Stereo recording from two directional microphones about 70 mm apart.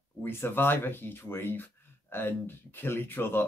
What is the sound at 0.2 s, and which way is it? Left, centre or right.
Speech, left.